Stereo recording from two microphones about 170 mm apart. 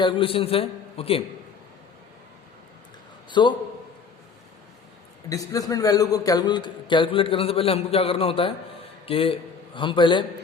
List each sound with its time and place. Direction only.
0.0 s a man's voice: 30° left (ahead or behind)
3.2 s a man's voice: 25° left (ahead or behind)
5.3 s a man's voice: 20° left (ahead or behind)